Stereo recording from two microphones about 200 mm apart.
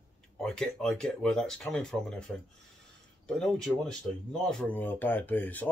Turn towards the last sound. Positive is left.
turn(degrees=10)  # may be behind; listen again after turning